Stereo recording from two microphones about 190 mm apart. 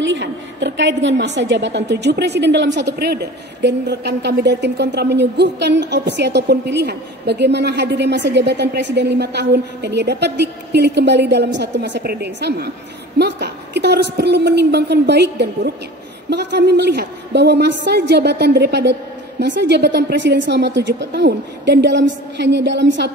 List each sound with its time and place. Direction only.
0.0 s a woman's voice: 70° right (ahead or behind)